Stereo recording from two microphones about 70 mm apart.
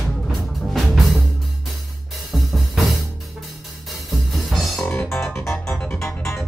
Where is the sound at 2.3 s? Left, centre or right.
Centre.